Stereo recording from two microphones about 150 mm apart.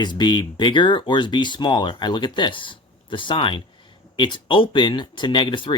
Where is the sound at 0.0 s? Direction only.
30° left (ahead or behind).